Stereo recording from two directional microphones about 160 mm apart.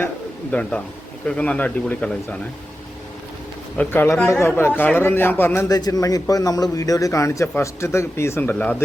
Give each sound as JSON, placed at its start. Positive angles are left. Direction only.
{"t": 0.5, "sound": "a man's voice", "side_deg": 10}
{"t": 3.8, "sound": "a man's voice", "side_deg": 15}